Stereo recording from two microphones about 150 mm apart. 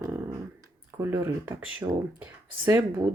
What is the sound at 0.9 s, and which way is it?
Speech, 15° right (ahead or behind).